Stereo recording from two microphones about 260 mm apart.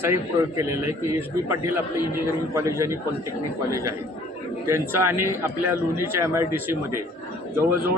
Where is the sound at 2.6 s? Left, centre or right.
Centre.